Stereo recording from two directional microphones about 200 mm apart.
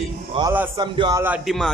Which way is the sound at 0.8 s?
20° right (ahead or behind).